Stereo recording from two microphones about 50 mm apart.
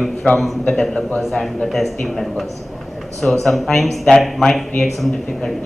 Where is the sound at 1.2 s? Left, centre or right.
Centre.